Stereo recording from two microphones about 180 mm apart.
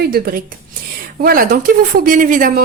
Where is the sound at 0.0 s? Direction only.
55° right (ahead or behind).